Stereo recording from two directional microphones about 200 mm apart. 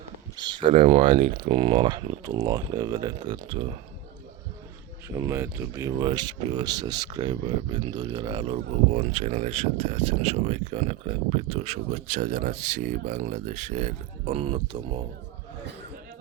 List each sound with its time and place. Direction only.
0.3 s speech: 25° right (ahead or behind)
5.0 s speech: 10° right (ahead or behind)
6.0 s speech: 20° right (ahead or behind)
8.9 s speech: 35° right (ahead or behind)